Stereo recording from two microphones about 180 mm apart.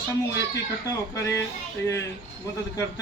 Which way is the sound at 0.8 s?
20° left (ahead or behind).